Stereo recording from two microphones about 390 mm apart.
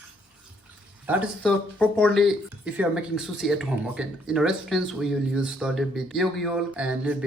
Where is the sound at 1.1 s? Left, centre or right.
Centre.